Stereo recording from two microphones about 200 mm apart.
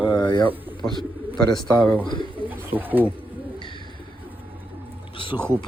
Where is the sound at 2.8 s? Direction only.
10° right (ahead or behind).